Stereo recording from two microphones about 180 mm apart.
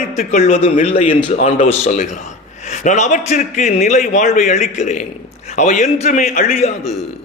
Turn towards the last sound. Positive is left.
turn(degrees=40)  # may be behind; listen again after turning